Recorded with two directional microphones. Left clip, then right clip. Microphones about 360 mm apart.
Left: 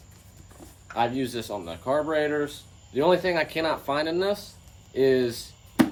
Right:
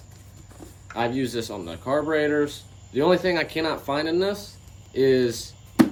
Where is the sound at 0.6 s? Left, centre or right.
Centre.